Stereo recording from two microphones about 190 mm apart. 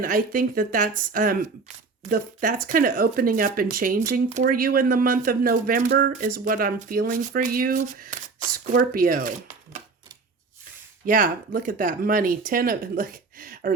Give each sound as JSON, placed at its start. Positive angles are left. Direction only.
{"t": 0.0, "sound": "speech", "side_deg": -45}
{"t": 11.0, "sound": "speech", "side_deg": -45}